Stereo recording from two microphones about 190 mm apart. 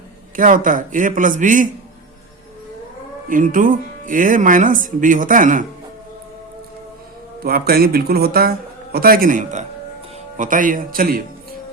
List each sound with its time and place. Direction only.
0.3 s speech: 45° right (ahead or behind)
3.2 s speech: 45° right (ahead or behind)
7.4 s speech: 50° right (ahead or behind)